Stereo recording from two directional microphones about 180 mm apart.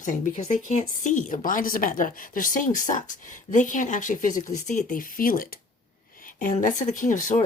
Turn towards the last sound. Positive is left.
turn(degrees=45)  # may be behind; listen again after turning